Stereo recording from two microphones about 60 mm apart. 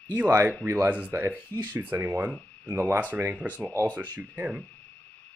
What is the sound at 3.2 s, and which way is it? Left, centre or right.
Speech, right.